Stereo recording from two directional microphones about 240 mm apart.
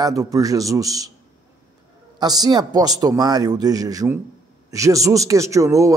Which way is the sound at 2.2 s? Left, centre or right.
Centre.